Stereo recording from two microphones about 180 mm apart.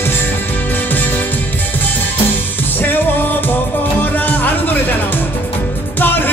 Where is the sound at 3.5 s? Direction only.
10° left (ahead or behind).